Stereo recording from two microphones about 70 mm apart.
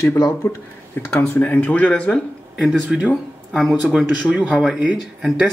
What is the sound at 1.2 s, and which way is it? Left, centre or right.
Speech, left.